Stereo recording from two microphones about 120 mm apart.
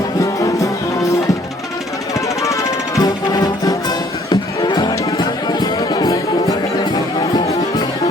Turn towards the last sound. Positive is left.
turn(degrees=35)  # may be behind; listen again after turning